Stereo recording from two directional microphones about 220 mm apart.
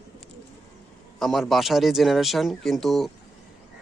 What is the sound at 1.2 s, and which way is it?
A man's voice, centre (ahead or behind).